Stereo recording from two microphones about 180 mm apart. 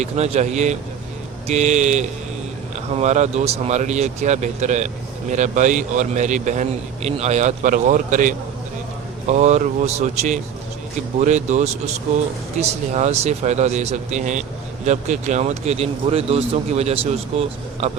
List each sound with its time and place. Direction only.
0.0 s a man's voice: 40° right (ahead or behind)